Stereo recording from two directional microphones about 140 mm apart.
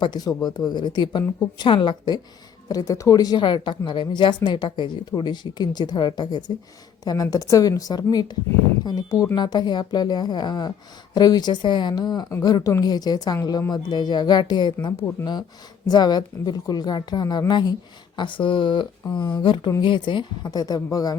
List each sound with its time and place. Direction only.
0.0 s speech: 30° left (ahead or behind)